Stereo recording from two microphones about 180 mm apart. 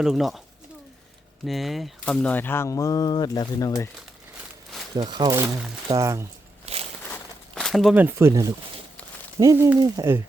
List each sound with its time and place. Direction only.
0.0 s speech: centre (ahead or behind)
1.5 s speech: centre (ahead or behind); by 3.7 s 20° left (ahead or behind)
4.9 s speech: 25° right (ahead or behind)
6.7 s a sound: 35° right (ahead or behind)
7.1 s walk: 5° left (ahead or behind)
7.9 s speech: 10° right (ahead or behind)